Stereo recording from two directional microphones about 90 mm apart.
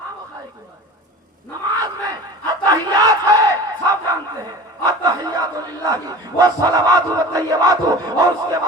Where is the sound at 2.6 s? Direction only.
45° right (ahead or behind).